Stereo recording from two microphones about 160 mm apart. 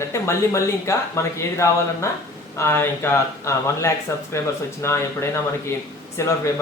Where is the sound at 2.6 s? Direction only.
15° left (ahead or behind).